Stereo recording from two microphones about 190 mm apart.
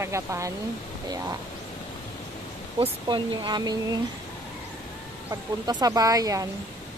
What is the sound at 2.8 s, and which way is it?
Speech, 25° right (ahead or behind).